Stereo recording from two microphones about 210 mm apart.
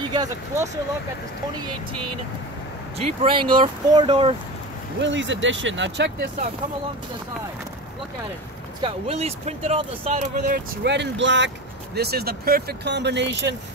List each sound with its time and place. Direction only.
0.1 s speech: 20° right (ahead or behind)
3.2 s speech: 25° right (ahead or behind)
5.0 s speech: 60° right (ahead or behind)
8.8 s speech: 30° right (ahead or behind)
10.7 s speech: 55° right (ahead or behind)